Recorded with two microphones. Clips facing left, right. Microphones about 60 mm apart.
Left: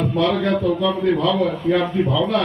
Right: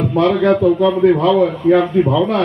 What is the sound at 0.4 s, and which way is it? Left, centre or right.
Speech, right.